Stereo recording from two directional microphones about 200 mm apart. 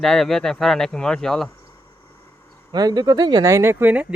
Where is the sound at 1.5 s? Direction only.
15° left (ahead or behind).